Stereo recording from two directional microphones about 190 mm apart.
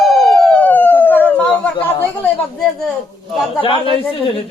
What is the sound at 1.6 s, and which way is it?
Chatter, 5° left (ahead or behind).